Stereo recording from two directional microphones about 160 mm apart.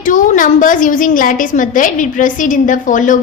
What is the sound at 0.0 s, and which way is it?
A woman's voice, 55° left (ahead or behind).